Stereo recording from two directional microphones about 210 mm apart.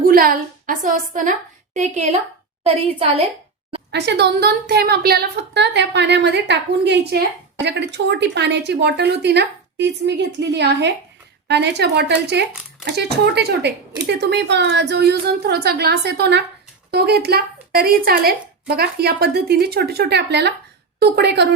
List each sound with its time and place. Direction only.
0.0 s a woman's voice: 45° right (ahead or behind); by 3.2 s 25° right (ahead or behind)
3.9 s a woman's voice: 55° right (ahead or behind)